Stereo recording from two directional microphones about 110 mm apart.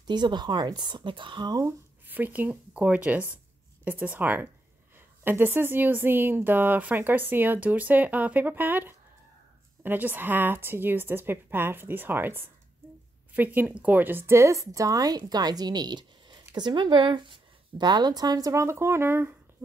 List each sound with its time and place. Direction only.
0.0 s a woman's voice: 40° right (ahead or behind)
2.0 s a woman's voice: 15° right (ahead or behind)